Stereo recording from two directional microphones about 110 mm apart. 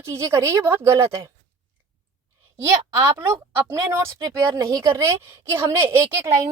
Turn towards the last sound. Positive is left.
turn(degrees=-25)  # may be behind; listen again after turning